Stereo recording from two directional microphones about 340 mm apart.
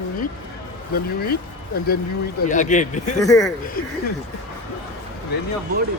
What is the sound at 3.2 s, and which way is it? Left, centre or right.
Speech, centre.